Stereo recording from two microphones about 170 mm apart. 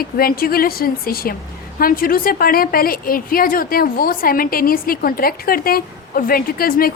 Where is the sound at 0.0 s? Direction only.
60° left (ahead or behind).